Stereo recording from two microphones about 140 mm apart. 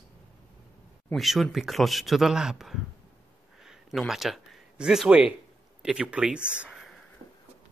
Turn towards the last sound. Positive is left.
turn(degrees=0)  # may be behind; listen again after turning